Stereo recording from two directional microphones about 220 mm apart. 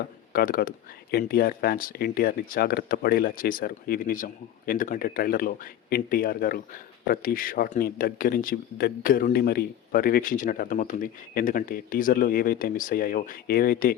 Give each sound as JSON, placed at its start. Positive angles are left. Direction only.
{"t": 0.3, "sound": "speech", "side_deg": 40}